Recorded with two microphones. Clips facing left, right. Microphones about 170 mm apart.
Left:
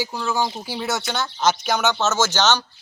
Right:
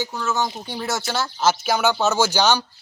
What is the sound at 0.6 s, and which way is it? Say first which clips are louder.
Speech: left 1 dB; centre (ahead or behind).